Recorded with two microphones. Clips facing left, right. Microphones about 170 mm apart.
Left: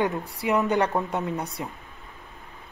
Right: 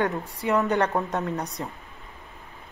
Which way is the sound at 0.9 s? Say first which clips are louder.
Even; centre (ahead or behind).